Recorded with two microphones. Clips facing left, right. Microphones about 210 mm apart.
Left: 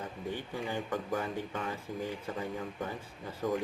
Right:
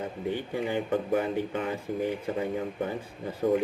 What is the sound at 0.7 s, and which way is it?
Speech, 25° right (ahead or behind).